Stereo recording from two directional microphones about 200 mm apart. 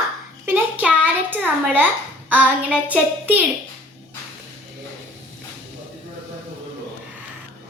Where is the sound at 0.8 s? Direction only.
10° right (ahead or behind).